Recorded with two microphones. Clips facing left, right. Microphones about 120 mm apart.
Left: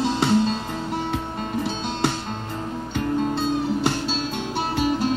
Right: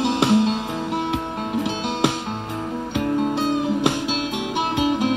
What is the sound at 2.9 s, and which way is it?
Music, 15° right (ahead or behind).